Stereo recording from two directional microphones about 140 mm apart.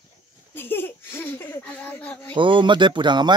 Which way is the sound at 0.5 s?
15° left (ahead or behind).